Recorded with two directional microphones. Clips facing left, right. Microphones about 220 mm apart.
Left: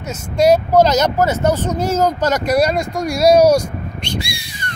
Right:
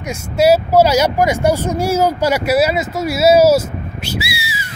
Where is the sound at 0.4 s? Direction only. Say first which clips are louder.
Right 1 dB; 5° right (ahead or behind).